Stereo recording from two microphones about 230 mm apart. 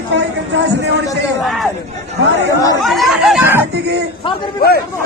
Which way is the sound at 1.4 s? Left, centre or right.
Centre.